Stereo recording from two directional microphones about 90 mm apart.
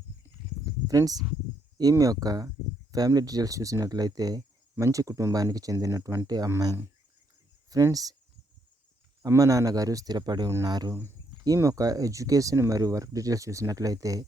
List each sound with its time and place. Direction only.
0.6 s a sound: 40° right (ahead or behind)
1.8 s speech: 40° right (ahead or behind)
6.2 s speech: 45° right (ahead or behind)
7.7 s speech: 40° right (ahead or behind)
9.2 s speech: 40° right (ahead or behind)
10.9 s cricket: 30° right (ahead or behind)
11.4 s speech: 40° right (ahead or behind)